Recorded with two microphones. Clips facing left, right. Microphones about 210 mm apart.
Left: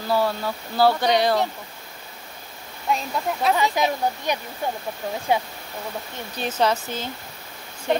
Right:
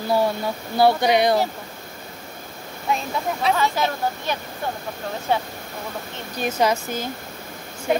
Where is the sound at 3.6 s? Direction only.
15° left (ahead or behind).